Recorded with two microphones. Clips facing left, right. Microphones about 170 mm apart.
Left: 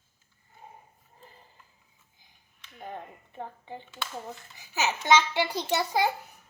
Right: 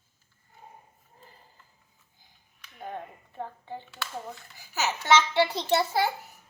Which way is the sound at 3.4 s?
15° left (ahead or behind).